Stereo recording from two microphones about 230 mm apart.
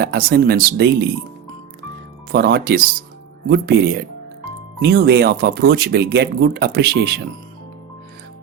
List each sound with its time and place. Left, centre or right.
0.0 s speech: right
2.3 s speech: right